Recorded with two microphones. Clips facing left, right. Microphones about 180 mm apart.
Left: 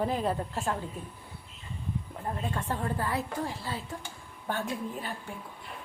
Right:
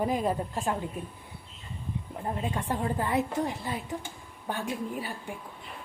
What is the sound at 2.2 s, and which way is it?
Speech, 15° right (ahead or behind).